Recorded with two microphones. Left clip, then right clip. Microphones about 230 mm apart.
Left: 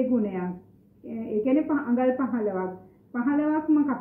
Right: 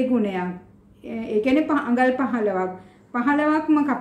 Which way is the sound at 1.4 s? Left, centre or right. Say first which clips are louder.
Right 3 dB; centre.